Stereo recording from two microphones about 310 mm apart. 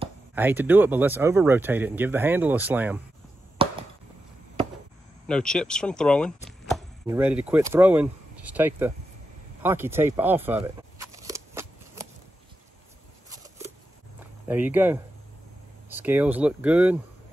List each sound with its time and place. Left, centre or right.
0.3 s speech: centre
3.6 s chop: centre
5.2 s speech: centre
10.6 s shuffling cards: centre
13.3 s a sound: centre
14.5 s speech: centre